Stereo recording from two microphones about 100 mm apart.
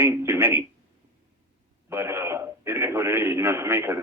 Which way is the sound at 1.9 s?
25° right (ahead or behind).